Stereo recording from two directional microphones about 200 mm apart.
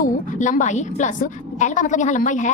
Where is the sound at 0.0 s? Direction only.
40° left (ahead or behind).